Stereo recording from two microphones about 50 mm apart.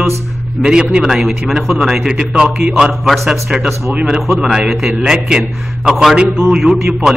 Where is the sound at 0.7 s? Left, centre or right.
Centre.